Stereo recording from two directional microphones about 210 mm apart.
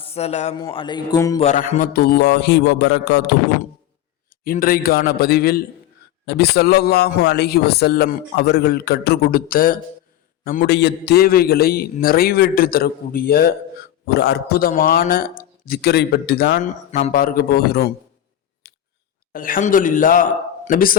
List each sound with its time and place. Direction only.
0.0 s a man's voice: 30° left (ahead or behind)
1.4 s a man's voice: 35° left (ahead or behind); by 3.3 s 55° left (ahead or behind)
4.4 s a man's voice: 45° left (ahead or behind)
18.6 s scissors: 50° left (ahead or behind)
19.3 s a man's voice: 40° left (ahead or behind)